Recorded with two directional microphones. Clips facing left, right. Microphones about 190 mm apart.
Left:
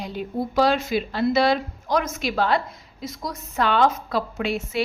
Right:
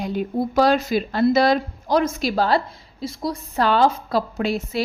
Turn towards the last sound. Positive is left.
turn(degrees=-35)  # may be behind; listen again after turning